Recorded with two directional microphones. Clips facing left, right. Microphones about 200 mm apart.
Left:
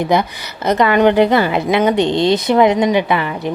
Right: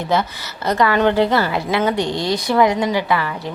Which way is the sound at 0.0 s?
15° left (ahead or behind).